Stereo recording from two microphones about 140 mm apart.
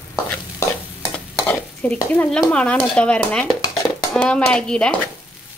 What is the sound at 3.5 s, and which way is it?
Dishes, 25° left (ahead or behind).